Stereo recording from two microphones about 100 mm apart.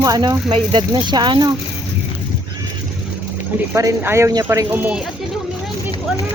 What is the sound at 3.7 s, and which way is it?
Speech, 35° right (ahead or behind).